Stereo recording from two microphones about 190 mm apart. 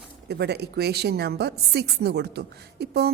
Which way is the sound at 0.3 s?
60° right (ahead or behind).